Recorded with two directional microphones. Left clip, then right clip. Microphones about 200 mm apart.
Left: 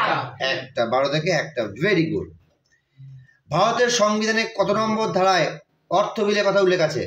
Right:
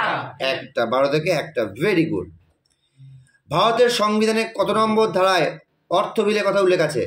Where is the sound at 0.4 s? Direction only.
30° right (ahead or behind).